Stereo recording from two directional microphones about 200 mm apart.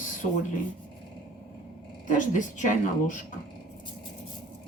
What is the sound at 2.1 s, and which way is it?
A woman's voice, 40° left (ahead or behind).